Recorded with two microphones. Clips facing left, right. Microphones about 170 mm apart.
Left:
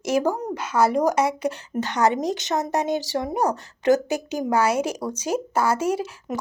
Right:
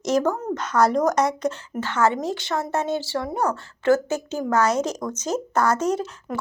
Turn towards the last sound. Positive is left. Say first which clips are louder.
# even
turn(degrees=20)  # may be behind; listen again after turning